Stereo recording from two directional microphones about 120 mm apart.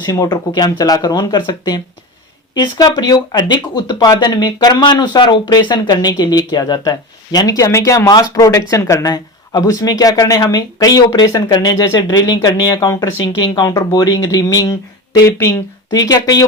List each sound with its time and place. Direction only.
0.0 s speech: 35° left (ahead or behind)
15.9 s speech: 30° left (ahead or behind)